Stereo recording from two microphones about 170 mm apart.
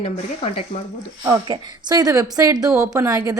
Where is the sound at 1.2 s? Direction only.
25° right (ahead or behind).